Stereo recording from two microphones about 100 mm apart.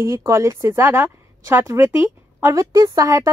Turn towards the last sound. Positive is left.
turn(degrees=-30)  # may be behind; listen again after turning